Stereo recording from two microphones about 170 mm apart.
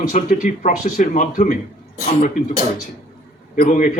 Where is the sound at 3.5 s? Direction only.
50° left (ahead or behind).